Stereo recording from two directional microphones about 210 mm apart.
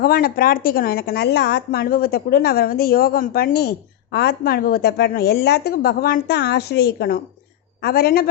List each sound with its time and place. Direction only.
0.0 s a woman's voice: 45° left (ahead or behind)